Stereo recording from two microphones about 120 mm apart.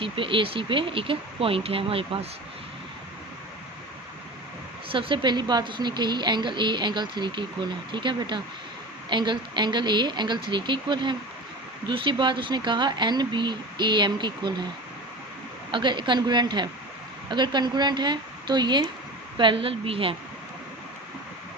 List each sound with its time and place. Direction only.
0.0 s speech: 45° right (ahead or behind)
4.9 s speech: 45° right (ahead or behind)
15.7 s speech: 40° right (ahead or behind)